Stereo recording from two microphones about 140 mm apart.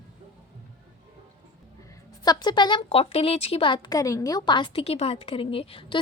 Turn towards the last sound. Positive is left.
turn(degrees=40)  # may be behind; listen again after turning